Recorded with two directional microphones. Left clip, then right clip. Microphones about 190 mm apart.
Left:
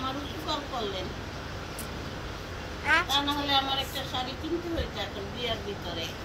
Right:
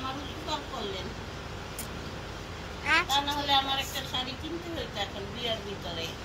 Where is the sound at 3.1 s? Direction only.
30° right (ahead or behind).